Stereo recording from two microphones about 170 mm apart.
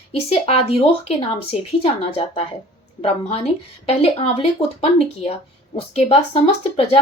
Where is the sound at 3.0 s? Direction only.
35° left (ahead or behind).